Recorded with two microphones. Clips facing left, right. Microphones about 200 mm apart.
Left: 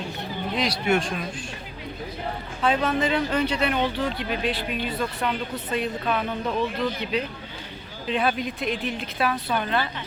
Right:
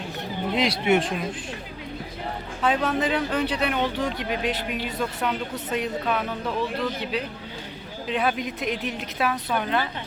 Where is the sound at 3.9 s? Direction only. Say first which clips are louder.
Even; 15° right (ahead or behind).